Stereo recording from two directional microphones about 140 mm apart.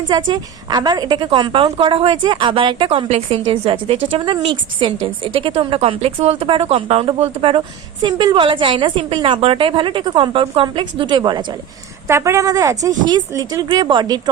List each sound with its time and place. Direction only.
0.1 s a woman's voice: 30° right (ahead or behind)
12.0 s a woman's voice: 20° right (ahead or behind)